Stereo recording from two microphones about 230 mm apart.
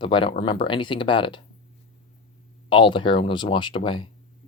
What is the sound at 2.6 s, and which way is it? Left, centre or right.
Speech, left.